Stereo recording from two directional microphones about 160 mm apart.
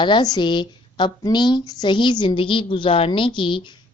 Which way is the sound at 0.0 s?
25° left (ahead or behind).